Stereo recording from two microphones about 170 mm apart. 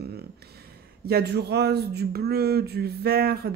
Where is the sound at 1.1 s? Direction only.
70° right (ahead or behind).